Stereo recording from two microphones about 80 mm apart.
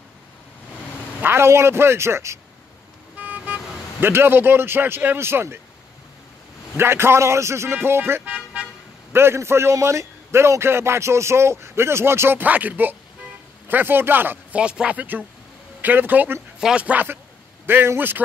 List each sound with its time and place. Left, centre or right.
1.2 s a man's voice: right
3.2 s speech: centre
6.8 s a man's voice: right
14.6 s a man's voice: centre
16.5 s a man's voice: centre